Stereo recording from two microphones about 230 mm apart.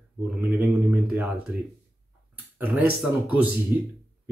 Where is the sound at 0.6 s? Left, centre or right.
Centre.